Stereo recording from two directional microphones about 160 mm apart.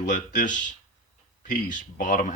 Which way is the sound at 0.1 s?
55° left (ahead or behind).